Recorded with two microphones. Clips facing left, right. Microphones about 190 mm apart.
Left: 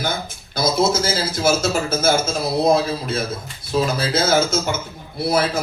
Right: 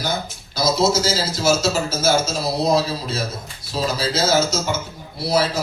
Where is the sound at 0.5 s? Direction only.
55° left (ahead or behind).